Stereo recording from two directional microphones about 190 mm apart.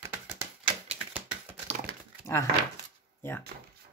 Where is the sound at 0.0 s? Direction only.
10° right (ahead or behind).